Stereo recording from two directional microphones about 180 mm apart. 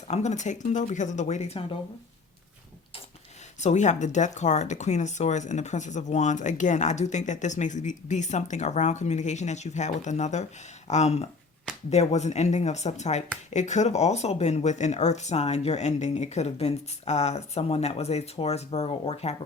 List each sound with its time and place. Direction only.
0.1 s speech: 40° left (ahead or behind)
3.6 s speech: 40° left (ahead or behind)